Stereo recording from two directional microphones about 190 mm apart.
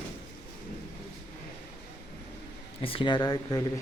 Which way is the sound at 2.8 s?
25° left (ahead or behind).